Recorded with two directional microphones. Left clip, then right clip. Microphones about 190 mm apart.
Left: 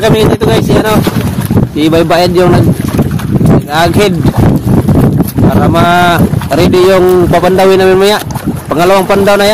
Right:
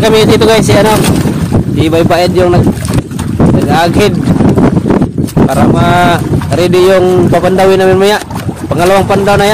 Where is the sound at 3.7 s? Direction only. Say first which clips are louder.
Left 1 dB; 25° left (ahead or behind).